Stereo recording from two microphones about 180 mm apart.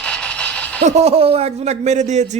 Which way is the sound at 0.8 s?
35° right (ahead or behind).